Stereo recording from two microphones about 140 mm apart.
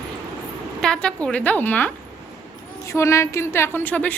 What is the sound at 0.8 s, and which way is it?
A woman's voice, 5° left (ahead or behind).